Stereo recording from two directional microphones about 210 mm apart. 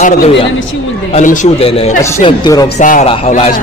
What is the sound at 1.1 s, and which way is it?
A man's voice, 35° left (ahead or behind).